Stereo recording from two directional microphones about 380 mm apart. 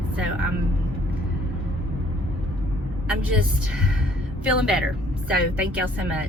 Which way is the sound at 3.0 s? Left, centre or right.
Centre.